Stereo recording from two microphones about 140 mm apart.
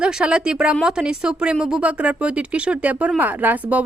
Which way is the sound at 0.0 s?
5° right (ahead or behind).